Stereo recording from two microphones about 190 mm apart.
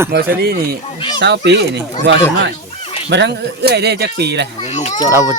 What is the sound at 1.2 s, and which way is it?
Speech, 65° right (ahead or behind).